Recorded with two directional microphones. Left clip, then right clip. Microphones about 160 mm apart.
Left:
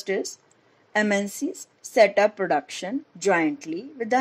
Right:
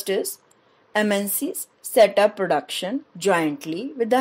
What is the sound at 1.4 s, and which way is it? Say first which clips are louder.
Speech: right 1 dB; 50° right (ahead or behind).